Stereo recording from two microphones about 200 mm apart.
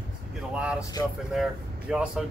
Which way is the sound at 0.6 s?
5° right (ahead or behind).